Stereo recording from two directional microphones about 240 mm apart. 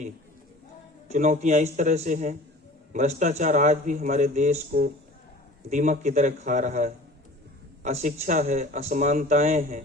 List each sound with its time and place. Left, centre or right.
1.1 s a man's voice: right